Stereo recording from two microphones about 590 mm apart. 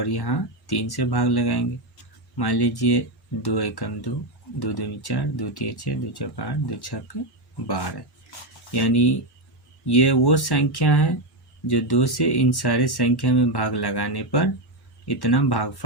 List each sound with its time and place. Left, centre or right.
0.0 s speech: left
8.3 s speech: left